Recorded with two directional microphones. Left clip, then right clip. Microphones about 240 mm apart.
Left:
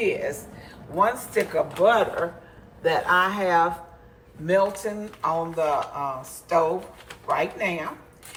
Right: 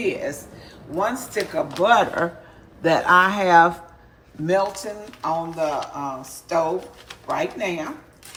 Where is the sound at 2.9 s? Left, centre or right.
Right.